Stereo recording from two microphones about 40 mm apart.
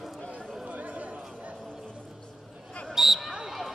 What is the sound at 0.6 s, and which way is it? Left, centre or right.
Chatter, right.